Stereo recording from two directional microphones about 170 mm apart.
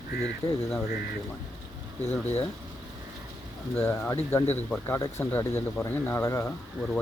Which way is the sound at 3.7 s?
10° left (ahead or behind).